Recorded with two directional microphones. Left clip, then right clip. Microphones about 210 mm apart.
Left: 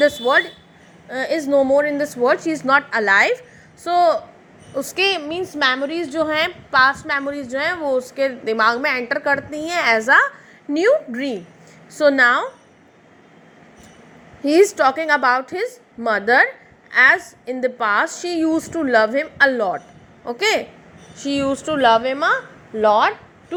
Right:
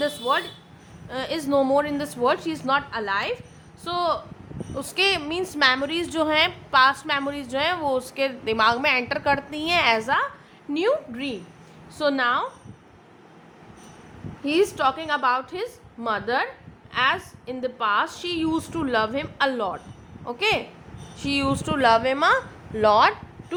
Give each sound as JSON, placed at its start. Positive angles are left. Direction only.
{"t": 0.0, "sound": "a woman's voice", "side_deg": 20}
{"t": 14.4, "sound": "a woman's voice", "side_deg": 20}